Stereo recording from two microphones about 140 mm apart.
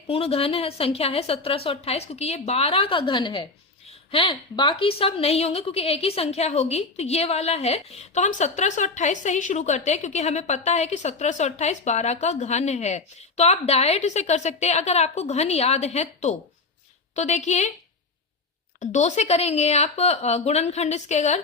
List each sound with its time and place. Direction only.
0.1 s a woman's voice: 45° left (ahead or behind)
18.8 s a woman's voice: 55° left (ahead or behind)